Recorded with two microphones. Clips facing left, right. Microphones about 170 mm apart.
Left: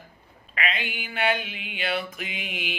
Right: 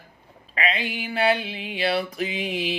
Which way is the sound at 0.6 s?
35° right (ahead or behind).